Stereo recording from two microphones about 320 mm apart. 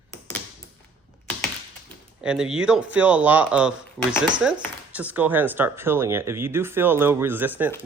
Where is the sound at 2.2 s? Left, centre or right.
Centre.